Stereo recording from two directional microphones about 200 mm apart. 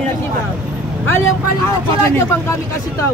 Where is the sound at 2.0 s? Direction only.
15° left (ahead or behind).